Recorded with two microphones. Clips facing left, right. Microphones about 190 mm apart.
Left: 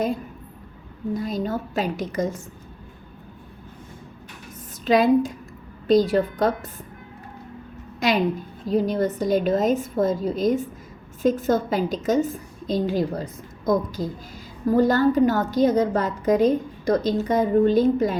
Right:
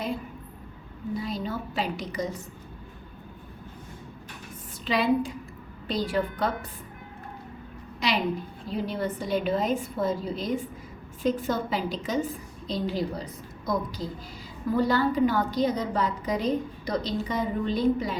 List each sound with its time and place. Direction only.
1.1 s a woman's voice: 45° left (ahead or behind)
4.9 s a woman's voice: 45° left (ahead or behind)
7.9 s a woman's voice: 45° left (ahead or behind)